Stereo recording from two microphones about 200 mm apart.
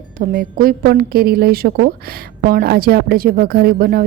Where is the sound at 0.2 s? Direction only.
45° right (ahead or behind).